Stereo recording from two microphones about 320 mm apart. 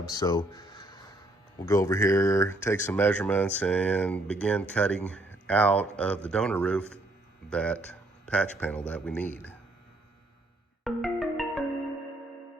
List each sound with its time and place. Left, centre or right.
0.1 s speech: centre
10.8 s music: centre